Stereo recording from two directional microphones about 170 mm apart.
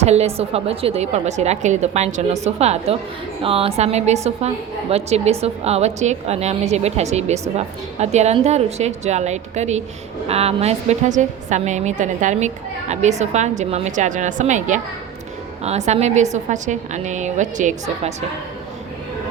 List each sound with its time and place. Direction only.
0.0 s a woman's voice: 40° right (ahead or behind)
15.9 s a woman's voice: 40° right (ahead or behind)